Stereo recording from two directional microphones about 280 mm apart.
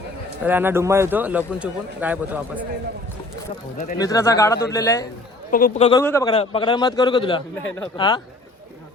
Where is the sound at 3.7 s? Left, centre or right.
Left.